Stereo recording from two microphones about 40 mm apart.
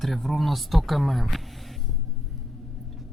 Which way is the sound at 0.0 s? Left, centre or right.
Centre.